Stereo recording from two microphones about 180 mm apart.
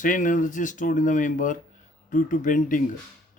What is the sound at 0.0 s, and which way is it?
Speech, 45° left (ahead or behind).